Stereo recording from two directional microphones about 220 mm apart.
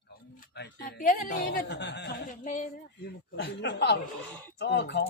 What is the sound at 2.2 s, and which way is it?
Speech, 35° left (ahead or behind).